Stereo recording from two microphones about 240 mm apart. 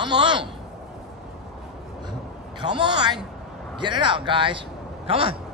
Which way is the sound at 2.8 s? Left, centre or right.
Centre.